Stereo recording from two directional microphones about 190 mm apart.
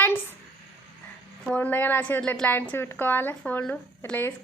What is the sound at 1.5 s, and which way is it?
A woman's voice, 10° left (ahead or behind).